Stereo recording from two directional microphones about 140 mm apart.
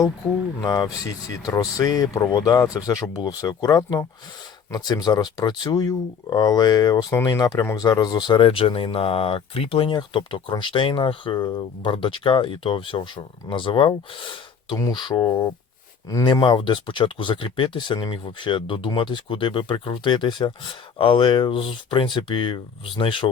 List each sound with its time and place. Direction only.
0.6 s speech: 25° left (ahead or behind)